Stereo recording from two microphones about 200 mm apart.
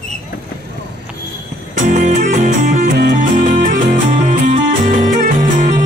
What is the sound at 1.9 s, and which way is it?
Music, 40° right (ahead or behind).